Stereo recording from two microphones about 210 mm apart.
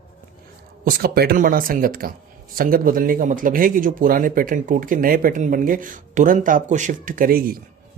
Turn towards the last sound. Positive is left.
turn(degrees=-45)  # may be behind; listen again after turning